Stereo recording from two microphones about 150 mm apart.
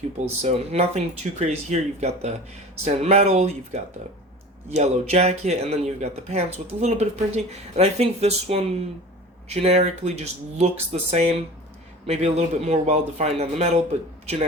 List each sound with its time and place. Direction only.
0.4 s speech: 45° right (ahead or behind)